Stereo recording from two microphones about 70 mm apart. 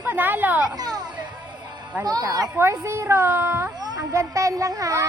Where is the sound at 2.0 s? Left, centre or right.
Right.